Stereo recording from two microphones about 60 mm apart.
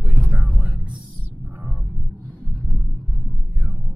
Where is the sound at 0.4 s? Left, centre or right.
Centre.